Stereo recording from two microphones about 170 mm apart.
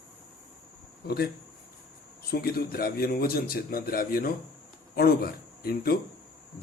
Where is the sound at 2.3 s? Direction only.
65° left (ahead or behind).